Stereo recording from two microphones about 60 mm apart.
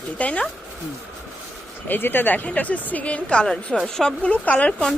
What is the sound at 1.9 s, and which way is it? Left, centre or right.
Speech, left.